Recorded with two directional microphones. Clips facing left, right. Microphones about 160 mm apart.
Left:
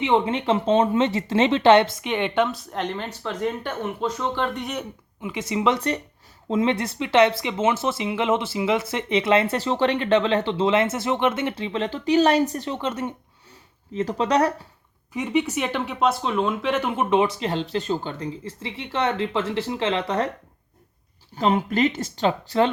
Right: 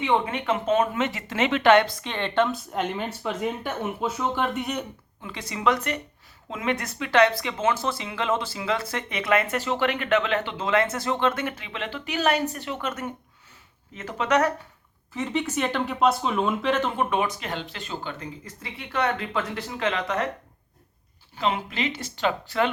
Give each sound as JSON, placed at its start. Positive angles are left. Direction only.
{"t": 0.0, "sound": "speech", "side_deg": 25}
{"t": 5.2, "sound": "speech", "side_deg": 20}
{"t": 15.1, "sound": "speech", "side_deg": 10}
{"t": 16.9, "sound": "speech", "side_deg": 20}
{"t": 21.3, "sound": "speech", "side_deg": 45}